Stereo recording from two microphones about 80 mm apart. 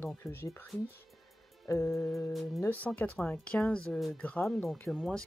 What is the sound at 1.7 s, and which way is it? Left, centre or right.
Music, left.